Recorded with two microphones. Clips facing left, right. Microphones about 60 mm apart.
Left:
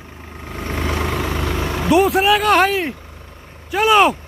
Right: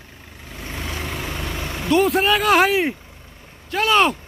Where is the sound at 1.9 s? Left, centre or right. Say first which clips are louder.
Left 3 dB; centre.